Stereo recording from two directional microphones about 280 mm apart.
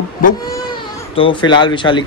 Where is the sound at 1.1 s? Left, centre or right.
Centre.